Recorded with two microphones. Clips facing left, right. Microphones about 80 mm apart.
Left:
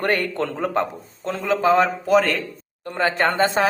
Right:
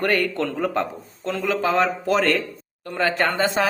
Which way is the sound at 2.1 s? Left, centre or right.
Centre.